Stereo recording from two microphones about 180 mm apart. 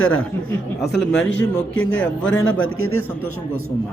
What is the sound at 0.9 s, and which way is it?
A man's voice, 75° left (ahead or behind).